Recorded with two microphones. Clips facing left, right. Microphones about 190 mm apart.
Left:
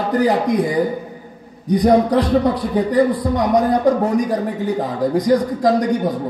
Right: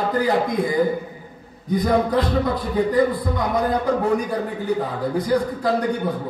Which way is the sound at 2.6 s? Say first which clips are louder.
Left 3 dB; 80° left.